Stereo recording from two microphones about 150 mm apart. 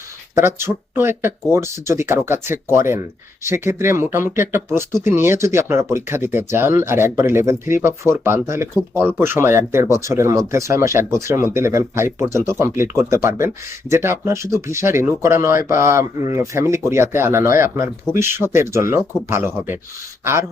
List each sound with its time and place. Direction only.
0.3 s speech: 15° right (ahead or behind)